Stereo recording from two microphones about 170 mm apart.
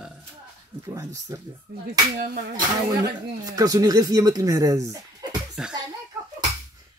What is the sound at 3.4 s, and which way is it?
Speech, 20° right (ahead or behind).